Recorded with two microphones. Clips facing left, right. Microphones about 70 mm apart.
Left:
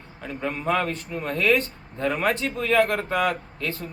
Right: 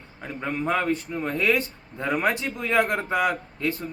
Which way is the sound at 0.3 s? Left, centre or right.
Centre.